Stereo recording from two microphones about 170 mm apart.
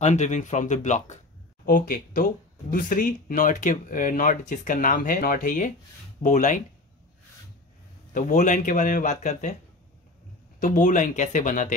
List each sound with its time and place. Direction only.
0.0 s speech: 45° left (ahead or behind)
1.7 s speech: 55° left (ahead or behind)
8.1 s speech: 50° left (ahead or behind)
10.6 s speech: 50° left (ahead or behind)